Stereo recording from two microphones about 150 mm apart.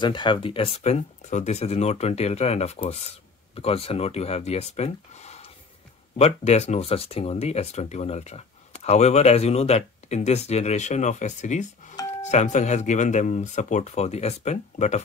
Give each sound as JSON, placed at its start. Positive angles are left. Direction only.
{"t": 0.0, "sound": "speech", "side_deg": 30}